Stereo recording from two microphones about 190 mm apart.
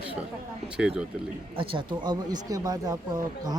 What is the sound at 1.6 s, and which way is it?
Speech, 25° right (ahead or behind).